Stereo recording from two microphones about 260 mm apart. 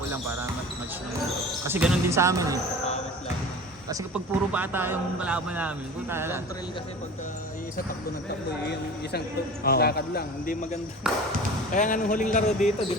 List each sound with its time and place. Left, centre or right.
1.6 s a man's voice: centre
3.8 s a man's voice: centre
9.6 s speech: left
11.1 s speech: centre
11.7 s speech: left